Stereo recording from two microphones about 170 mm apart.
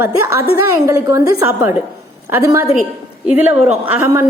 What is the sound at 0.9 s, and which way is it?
A woman's voice, 20° right (ahead or behind).